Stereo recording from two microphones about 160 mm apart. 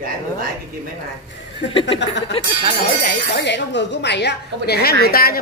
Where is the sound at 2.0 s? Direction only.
90° left.